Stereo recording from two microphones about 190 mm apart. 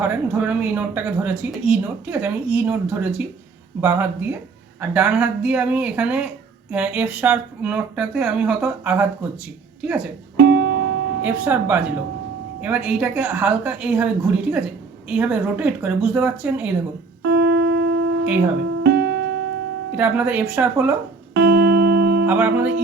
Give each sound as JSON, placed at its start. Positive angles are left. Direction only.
{"t": 0.0, "sound": "speech", "side_deg": -10}
{"t": 10.3, "sound": "music", "side_deg": -60}
{"t": 11.2, "sound": "a woman's voice", "side_deg": -10}
{"t": 17.4, "sound": "wind instrument", "side_deg": -65}
{"t": 18.8, "sound": "music", "side_deg": -65}
{"t": 20.0, "sound": "speech", "side_deg": -10}
{"t": 21.3, "sound": "music", "side_deg": -65}
{"t": 22.3, "sound": "speech", "side_deg": -10}